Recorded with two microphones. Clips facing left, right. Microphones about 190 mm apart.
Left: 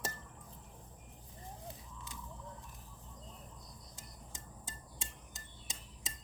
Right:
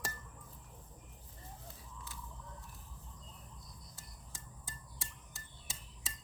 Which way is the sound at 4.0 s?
20° left (ahead or behind).